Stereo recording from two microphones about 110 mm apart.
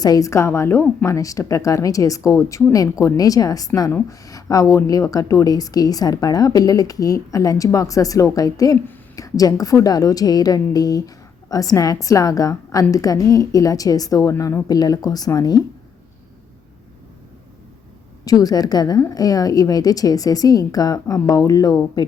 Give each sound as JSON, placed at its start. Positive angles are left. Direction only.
{"t": 0.0, "sound": "a woman's voice", "side_deg": 35}
{"t": 18.3, "sound": "a woman's voice", "side_deg": 35}